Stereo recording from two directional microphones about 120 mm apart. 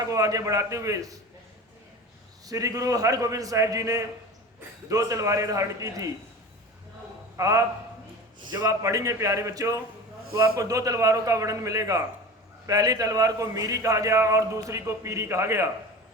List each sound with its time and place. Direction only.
0.0 s a man's voice: 30° right (ahead or behind)
2.5 s a man's voice: 30° right (ahead or behind)
7.3 s a man's voice: 25° right (ahead or behind)